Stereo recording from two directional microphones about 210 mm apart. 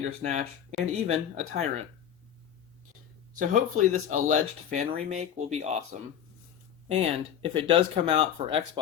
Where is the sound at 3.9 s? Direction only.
35° right (ahead or behind).